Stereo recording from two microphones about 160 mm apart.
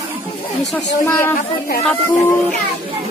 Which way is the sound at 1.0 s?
15° left (ahead or behind).